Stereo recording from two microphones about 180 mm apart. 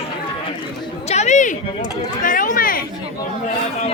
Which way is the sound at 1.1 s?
40° left (ahead or behind).